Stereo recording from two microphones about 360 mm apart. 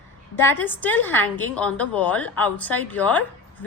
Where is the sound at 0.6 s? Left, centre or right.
Centre.